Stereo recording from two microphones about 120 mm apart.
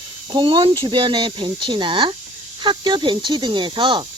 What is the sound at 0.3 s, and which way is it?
Speech, 40° right (ahead or behind).